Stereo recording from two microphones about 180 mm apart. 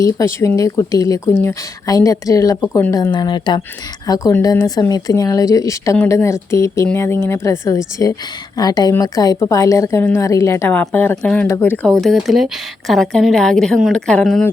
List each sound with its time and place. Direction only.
0.0 s a woman's voice: 15° left (ahead or behind)